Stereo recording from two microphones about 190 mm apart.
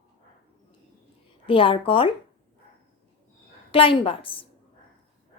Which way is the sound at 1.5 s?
25° left (ahead or behind).